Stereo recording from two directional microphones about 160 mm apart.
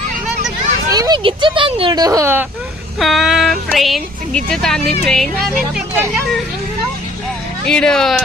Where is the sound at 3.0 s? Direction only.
Centre (ahead or behind).